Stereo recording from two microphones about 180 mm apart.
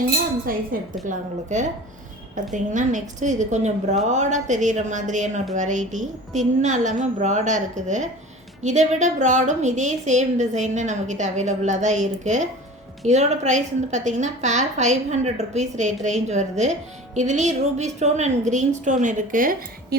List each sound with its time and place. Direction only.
1.0 s a woman's voice: 45° right (ahead or behind)